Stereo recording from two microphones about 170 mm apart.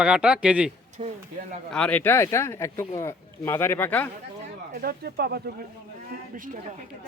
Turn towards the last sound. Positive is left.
turn(degrees=-50)  # may be behind; listen again after turning